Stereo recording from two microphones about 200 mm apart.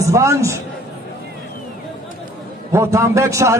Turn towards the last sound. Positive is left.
turn(degrees=-15)  # may be behind; listen again after turning